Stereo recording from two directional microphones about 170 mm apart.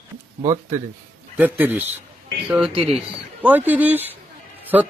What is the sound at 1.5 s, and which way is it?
Speech, 10° right (ahead or behind).